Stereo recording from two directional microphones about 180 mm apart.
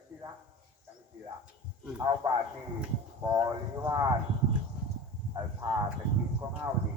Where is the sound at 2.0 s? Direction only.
20° right (ahead or behind).